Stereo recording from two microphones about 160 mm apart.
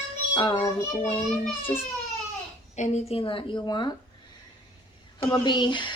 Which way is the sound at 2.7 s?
45° left (ahead or behind).